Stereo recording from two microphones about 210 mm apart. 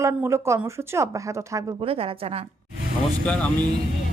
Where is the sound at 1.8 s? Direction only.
25° right (ahead or behind).